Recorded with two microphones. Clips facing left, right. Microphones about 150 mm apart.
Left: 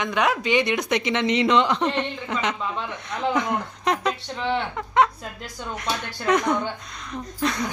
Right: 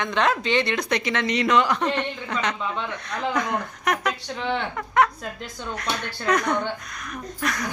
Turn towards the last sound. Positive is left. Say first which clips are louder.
# left 3 dB
turn(degrees=25)  # may be behind; listen again after turning